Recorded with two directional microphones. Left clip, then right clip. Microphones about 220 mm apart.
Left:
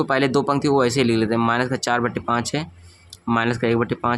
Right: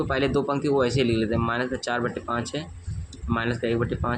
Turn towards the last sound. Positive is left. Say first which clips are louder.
# left 6 dB
turn(degrees=30)  # may be behind; listen again after turning